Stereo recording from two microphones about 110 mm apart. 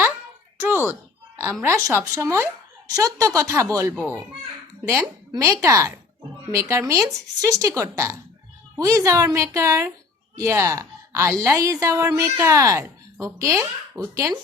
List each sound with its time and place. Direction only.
0.6 s a sound: 20° right (ahead or behind)
1.6 s a woman's voice: 25° right (ahead or behind)
5.5 s a woman's voice: 25° right (ahead or behind)